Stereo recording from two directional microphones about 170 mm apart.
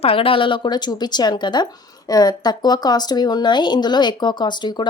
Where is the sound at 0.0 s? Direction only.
35° left (ahead or behind).